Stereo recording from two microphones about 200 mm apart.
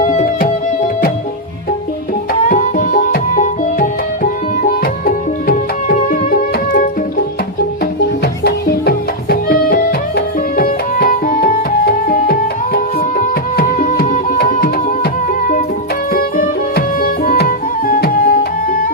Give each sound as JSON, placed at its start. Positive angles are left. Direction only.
{"t": 2.5, "sound": "music", "side_deg": 40}
{"t": 8.4, "sound": "music", "side_deg": 50}
{"t": 16.1, "sound": "music", "side_deg": 45}